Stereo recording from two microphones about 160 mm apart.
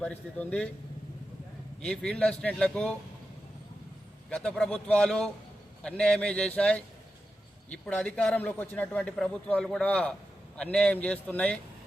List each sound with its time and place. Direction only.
0.0 s speech: 10° left (ahead or behind)
1.8 s speech: 5° left (ahead or behind)
4.3 s a man's voice: 5° left (ahead or behind)